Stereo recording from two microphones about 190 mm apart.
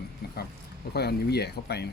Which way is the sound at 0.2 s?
55° left (ahead or behind).